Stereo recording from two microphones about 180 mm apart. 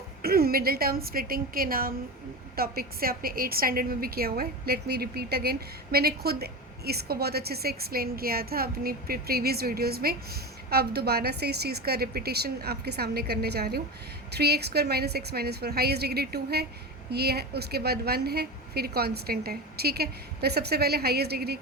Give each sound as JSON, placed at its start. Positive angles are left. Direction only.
{"t": 0.2, "sound": "a woman's voice", "side_deg": -55}